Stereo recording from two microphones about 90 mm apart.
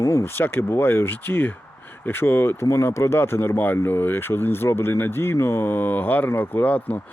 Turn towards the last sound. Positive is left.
turn(degrees=20)  # may be behind; listen again after turning